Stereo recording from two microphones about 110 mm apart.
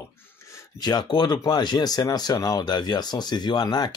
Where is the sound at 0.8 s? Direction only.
40° left (ahead or behind).